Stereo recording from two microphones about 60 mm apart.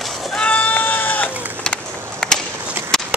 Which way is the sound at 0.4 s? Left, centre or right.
Left.